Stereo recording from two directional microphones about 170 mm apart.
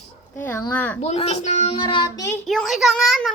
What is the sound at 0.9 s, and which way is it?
A woman's voice, 40° left (ahead or behind).